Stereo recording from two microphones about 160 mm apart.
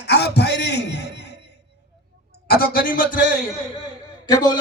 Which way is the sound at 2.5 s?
70° left (ahead or behind).